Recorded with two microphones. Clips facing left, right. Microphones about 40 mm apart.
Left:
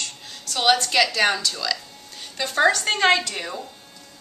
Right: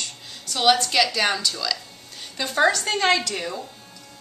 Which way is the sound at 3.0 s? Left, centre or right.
Centre.